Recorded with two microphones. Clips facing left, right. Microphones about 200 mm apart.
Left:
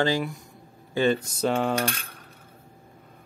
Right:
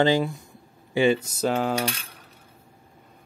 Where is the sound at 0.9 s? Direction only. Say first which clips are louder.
Right 2 dB; 10° right (ahead or behind).